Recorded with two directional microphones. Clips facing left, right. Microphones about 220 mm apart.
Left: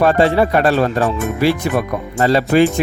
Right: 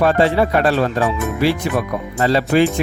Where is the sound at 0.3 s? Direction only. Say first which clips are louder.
Left 2 dB; 45° left (ahead or behind).